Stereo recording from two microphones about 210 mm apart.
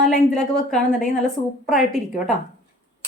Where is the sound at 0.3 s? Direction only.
Centre (ahead or behind).